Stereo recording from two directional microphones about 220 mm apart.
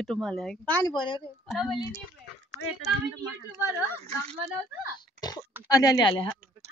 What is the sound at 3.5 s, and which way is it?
Speech, 10° right (ahead or behind).